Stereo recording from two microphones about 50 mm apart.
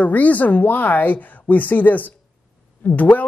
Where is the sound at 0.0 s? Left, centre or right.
Left.